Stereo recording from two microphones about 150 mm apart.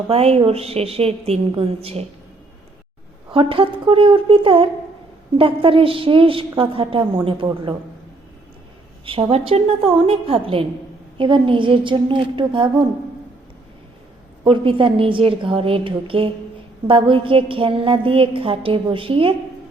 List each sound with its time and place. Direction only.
0.1 s a woman's voice: 40° right (ahead or behind)
3.3 s a woman's voice: 35° right (ahead or behind)
9.0 s a woman's voice: 35° right (ahead or behind)
14.4 s a woman's voice: 35° right (ahead or behind)